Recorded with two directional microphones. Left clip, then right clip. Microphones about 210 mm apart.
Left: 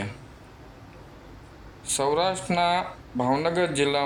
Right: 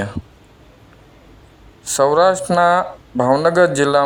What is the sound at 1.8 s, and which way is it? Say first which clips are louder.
Speech: right 11 dB; 35° right (ahead or behind).